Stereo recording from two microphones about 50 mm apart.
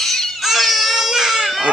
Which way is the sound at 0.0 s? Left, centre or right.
Centre.